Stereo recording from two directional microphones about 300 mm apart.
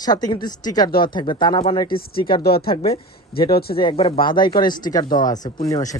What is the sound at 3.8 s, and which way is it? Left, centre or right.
Speech, centre.